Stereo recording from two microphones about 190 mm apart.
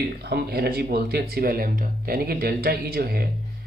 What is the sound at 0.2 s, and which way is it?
Speech, 60° right (ahead or behind).